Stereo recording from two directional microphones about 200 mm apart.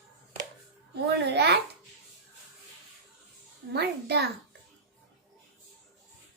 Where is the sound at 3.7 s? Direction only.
55° right (ahead or behind).